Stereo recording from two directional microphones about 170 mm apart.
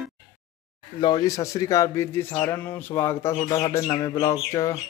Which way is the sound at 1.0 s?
20° left (ahead or behind).